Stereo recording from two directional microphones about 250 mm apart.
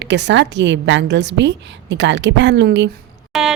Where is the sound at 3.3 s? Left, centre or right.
Centre.